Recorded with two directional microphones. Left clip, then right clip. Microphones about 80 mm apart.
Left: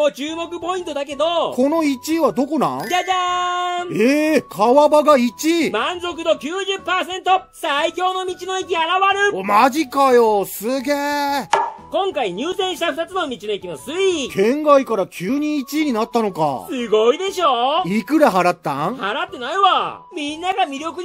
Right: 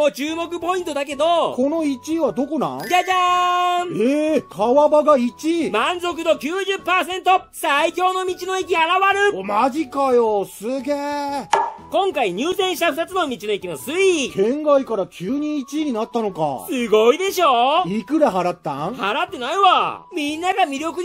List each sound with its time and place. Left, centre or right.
0.0 s speech: right
1.6 s speech: left
2.9 s speech: right
3.9 s speech: left
5.7 s speech: right
9.5 s speech: left
11.9 s speech: right
14.3 s speech: left
16.7 s speech: right
17.8 s speech: left
19.0 s speech: right